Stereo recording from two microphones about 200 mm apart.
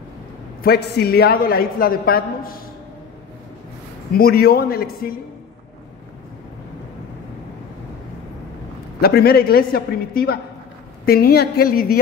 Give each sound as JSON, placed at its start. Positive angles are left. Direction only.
{"t": 0.7, "sound": "a woman's voice", "side_deg": 55}
{"t": 4.2, "sound": "a woman's voice", "side_deg": 50}
{"t": 9.0, "sound": "a woman's voice", "side_deg": 50}